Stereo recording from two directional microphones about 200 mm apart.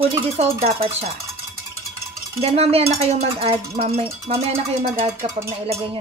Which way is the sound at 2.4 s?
30° right (ahead or behind).